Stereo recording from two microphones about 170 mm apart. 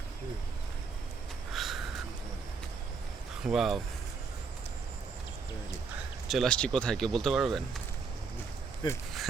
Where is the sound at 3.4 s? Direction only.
Centre (ahead or behind).